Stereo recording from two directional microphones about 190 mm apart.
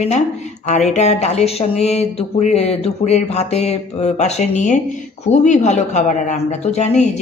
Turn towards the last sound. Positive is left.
turn(degrees=35)  # may be behind; listen again after turning